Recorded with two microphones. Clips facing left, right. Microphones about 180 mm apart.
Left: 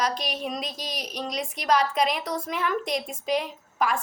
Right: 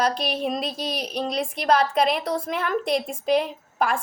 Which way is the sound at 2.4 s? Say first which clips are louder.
Right 3 dB; 50° right (ahead or behind).